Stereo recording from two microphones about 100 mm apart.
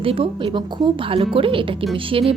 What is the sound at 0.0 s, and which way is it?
Speech, 65° right (ahead or behind).